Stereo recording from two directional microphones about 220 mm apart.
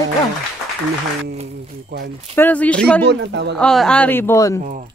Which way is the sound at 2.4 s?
5° left (ahead or behind).